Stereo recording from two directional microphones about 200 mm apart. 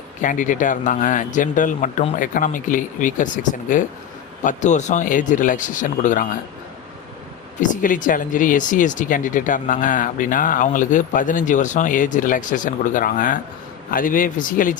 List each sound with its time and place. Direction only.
0.2 s speech: 40° left (ahead or behind)
7.7 s speech: 40° left (ahead or behind)